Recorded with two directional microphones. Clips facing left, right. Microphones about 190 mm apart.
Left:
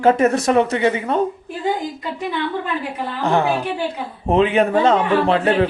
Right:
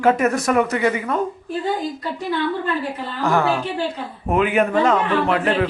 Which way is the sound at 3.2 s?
20° left (ahead or behind).